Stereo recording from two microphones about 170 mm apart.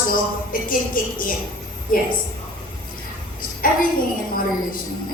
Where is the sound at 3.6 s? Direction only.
55° left (ahead or behind).